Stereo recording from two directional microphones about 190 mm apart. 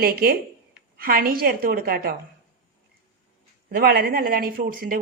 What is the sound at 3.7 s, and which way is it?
Speech, 50° right (ahead or behind).